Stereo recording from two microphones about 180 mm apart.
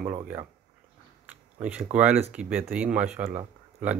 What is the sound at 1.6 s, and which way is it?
Speech, 5° right (ahead or behind).